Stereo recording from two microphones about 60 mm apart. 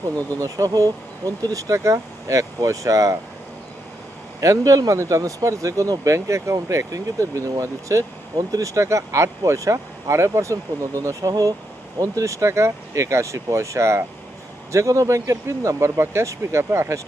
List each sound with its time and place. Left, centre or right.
0.0 s speech: right
4.4 s speech: right
11.9 s speech: right